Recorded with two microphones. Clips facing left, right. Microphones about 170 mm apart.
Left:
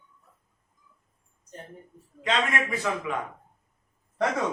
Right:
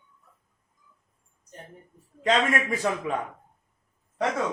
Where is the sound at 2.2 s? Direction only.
40° right (ahead or behind).